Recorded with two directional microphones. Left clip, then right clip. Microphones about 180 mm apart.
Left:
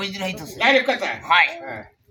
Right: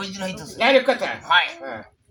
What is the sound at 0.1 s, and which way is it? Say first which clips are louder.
Speech: left 2 dB; 10° right (ahead or behind).